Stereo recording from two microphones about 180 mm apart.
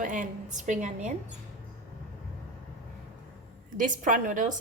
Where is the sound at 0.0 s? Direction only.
45° right (ahead or behind).